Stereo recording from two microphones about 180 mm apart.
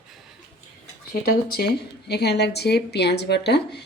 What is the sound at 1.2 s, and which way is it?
Speech, 60° left (ahead or behind).